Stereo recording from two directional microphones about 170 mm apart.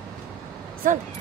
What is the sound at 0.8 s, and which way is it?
Speech, 50° right (ahead or behind).